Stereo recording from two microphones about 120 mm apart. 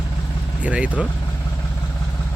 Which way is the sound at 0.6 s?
10° right (ahead or behind).